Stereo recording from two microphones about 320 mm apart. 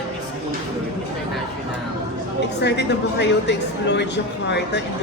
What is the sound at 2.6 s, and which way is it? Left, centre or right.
A woman's voice, left.